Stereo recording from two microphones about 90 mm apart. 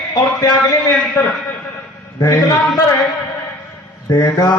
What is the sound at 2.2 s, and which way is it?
Speech, 45° left (ahead or behind).